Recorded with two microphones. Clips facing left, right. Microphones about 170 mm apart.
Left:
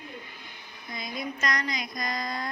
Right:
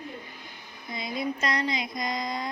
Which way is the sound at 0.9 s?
25° right (ahead or behind).